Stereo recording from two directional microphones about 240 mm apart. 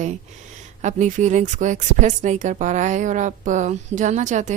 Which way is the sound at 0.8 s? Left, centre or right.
Right.